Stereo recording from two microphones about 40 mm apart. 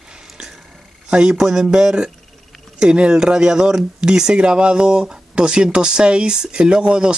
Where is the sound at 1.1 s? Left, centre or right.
Centre.